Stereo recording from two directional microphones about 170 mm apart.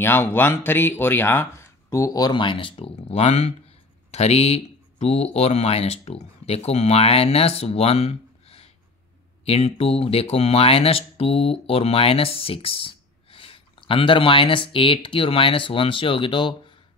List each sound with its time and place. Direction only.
0.0 s speech: 15° left (ahead or behind); by 16.5 s 30° left (ahead or behind)